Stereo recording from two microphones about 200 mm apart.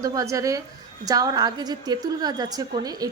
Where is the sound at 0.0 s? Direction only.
15° right (ahead or behind).